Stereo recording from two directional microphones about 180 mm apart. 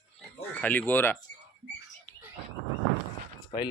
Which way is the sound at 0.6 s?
10° left (ahead or behind).